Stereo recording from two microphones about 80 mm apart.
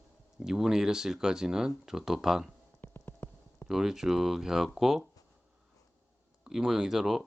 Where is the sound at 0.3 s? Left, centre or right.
Centre.